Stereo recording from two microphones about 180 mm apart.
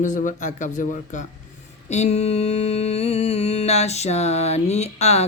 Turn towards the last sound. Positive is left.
turn(degrees=35)  # may be behind; listen again after turning